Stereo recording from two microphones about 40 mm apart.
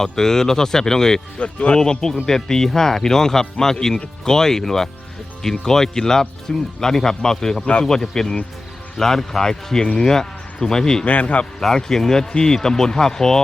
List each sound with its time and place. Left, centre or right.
0.0 s speech: centre
1.4 s speech: left
1.8 s speech: centre
11.0 s a man's voice: left
11.6 s speech: centre